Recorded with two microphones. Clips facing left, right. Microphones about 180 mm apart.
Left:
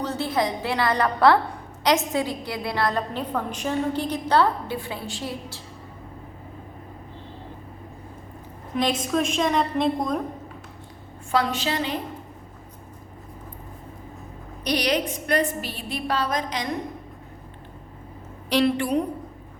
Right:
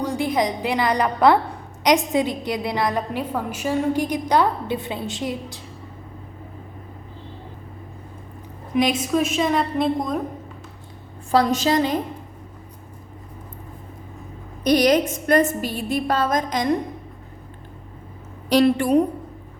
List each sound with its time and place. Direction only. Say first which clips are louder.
0.0 s a woman's voice: right 3 dB; 15° right (ahead or behind)
8.7 s a woman's voice: right 4 dB; 10° right (ahead or behind)
11.3 s a woman's voice: right 6 dB; 40° right (ahead or behind)
14.6 s a woman's voice: right 7 dB; 45° right (ahead or behind)
18.4 s a woman's voice: right 5 dB; 45° right (ahead or behind)